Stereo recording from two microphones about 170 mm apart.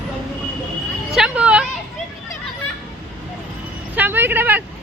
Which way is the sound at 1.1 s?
5° right (ahead or behind).